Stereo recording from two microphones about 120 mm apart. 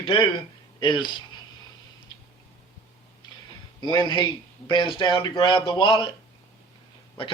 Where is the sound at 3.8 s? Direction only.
40° left (ahead or behind).